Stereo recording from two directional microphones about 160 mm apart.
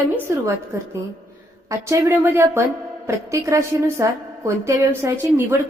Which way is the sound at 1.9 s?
15° right (ahead or behind).